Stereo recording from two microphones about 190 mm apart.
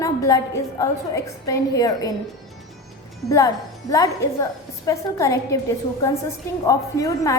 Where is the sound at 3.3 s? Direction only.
15° left (ahead or behind).